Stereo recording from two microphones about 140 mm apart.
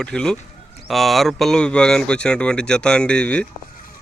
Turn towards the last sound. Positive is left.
turn(degrees=10)  # may be behind; listen again after turning